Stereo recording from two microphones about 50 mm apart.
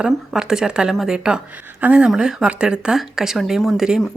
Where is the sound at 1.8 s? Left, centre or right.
Right.